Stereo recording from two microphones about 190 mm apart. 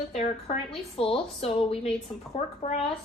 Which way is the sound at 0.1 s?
35° left (ahead or behind).